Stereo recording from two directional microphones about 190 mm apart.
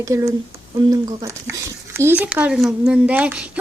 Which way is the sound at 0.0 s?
15° right (ahead or behind).